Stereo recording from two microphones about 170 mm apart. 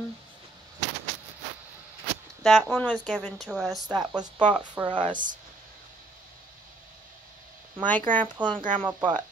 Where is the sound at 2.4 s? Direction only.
Centre (ahead or behind).